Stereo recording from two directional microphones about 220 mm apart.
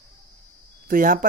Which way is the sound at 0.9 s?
40° right (ahead or behind).